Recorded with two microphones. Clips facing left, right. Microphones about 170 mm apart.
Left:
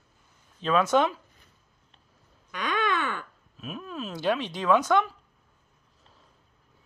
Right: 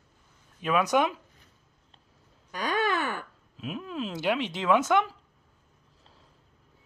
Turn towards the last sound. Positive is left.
turn(degrees=-20)  # may be behind; listen again after turning